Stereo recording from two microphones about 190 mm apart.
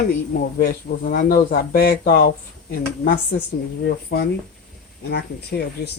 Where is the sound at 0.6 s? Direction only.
45° left (ahead or behind).